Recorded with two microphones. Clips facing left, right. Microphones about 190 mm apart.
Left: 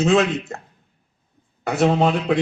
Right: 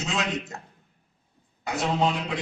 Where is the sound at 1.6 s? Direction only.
60° left (ahead or behind).